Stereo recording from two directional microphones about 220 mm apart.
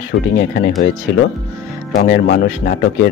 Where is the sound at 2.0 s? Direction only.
40° left (ahead or behind).